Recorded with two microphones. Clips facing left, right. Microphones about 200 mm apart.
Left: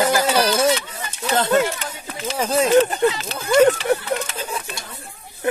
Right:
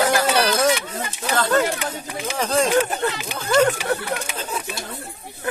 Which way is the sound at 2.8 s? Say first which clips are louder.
Left 5 dB; 15° right (ahead or behind).